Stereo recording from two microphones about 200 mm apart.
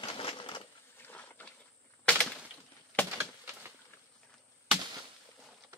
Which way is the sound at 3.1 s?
10° right (ahead or behind).